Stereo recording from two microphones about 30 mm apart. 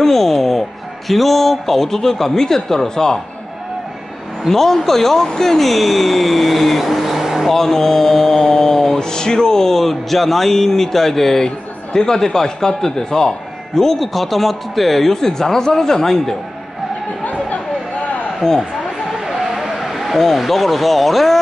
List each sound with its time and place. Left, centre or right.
0.0 s speech: centre
4.5 s speech: centre
7.5 s speech: centre
9.8 s speech: centre
11.4 s a man's voice: left
13.9 s speech: centre
17.2 s chatter: left
18.4 s speech: centre
19.2 s a sound: centre
20.2 s speech: centre